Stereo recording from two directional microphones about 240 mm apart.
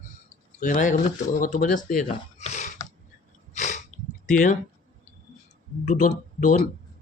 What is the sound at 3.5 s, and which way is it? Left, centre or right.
Sneeze, left.